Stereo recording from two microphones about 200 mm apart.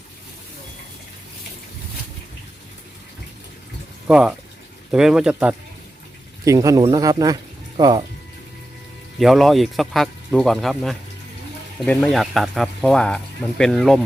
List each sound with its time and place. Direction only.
4.0 s speech: 5° right (ahead or behind); by 8.0 s 20° right (ahead or behind)
9.1 s speech: centre (ahead or behind)